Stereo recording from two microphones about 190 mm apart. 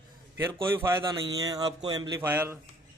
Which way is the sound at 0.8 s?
15° right (ahead or behind).